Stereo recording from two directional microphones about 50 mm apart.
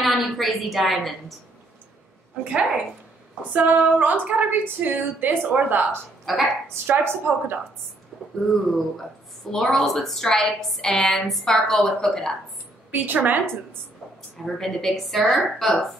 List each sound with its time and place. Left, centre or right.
0.0 s a sound: centre
2.4 s a woman's voice: right
3.5 s a woman's voice: right
6.3 s a woman's voice: centre
6.9 s a woman's voice: right
8.1 s a sound: centre
8.5 s a woman's voice: centre
12.9 s a woman's voice: right
14.4 s a woman's voice: centre